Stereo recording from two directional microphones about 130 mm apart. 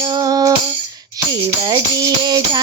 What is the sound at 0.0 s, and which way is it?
Music, 35° right (ahead or behind).